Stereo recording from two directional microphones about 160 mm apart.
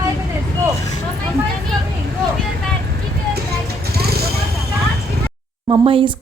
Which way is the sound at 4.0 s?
80° right.